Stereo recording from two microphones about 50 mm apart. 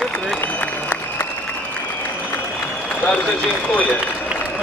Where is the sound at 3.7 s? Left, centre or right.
Left.